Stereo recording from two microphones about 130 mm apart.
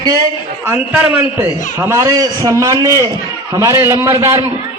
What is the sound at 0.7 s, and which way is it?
A man's voice, 15° right (ahead or behind).